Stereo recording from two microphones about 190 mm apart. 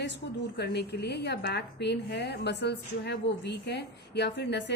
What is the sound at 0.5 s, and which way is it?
A woman's voice, 60° left (ahead or behind).